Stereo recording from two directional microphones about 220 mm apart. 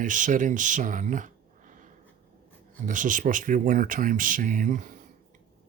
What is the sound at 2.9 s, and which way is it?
Speech, 35° right (ahead or behind).